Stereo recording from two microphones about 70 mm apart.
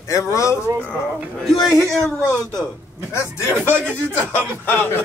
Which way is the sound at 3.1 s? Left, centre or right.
Left.